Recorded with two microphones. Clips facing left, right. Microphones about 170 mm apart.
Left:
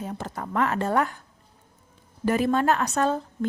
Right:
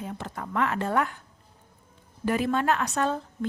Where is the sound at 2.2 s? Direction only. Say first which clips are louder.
Left 3 dB; 40° left (ahead or behind).